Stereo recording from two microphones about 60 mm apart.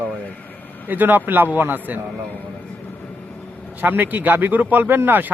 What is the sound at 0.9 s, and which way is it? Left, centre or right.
Speech, right.